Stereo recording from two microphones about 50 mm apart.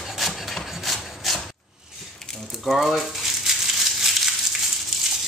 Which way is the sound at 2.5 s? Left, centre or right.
Centre.